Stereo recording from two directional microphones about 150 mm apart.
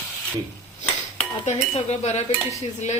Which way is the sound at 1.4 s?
45° left (ahead or behind).